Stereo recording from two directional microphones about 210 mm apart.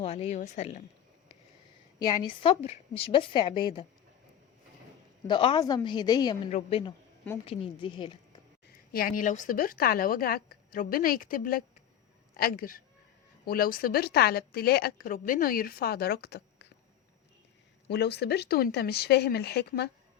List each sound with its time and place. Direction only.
0.0 s a woman's voice: 30° left (ahead or behind)
2.0 s a woman's voice: 20° left (ahead or behind)
5.3 s a woman's voice: 20° left (ahead or behind)
8.9 s a woman's voice: 45° left (ahead or behind)
17.8 s a woman's voice: 50° left (ahead or behind)